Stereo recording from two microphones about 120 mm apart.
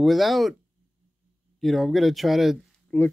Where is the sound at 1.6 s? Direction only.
Centre (ahead or behind).